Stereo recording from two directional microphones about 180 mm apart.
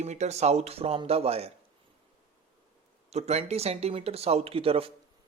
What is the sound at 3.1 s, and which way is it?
Speech, 35° right (ahead or behind).